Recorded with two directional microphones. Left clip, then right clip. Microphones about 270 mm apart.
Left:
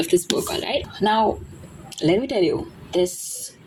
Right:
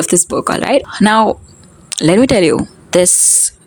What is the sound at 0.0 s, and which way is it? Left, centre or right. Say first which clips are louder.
Speech: right 6 dB; right.